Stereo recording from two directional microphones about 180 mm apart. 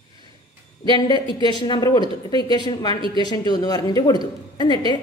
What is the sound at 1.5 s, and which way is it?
Speech, 25° left (ahead or behind).